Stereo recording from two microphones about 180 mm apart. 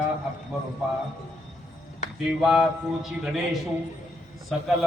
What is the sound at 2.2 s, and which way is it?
Speech, 5° right (ahead or behind).